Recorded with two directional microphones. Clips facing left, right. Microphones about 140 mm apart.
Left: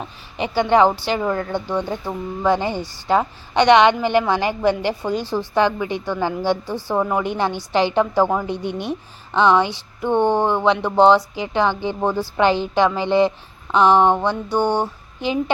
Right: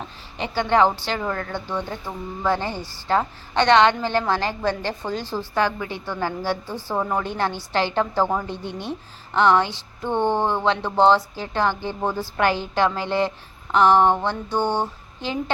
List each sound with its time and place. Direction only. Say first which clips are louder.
0.0 s a woman's voice: left 4 dB; 15° left (ahead or behind)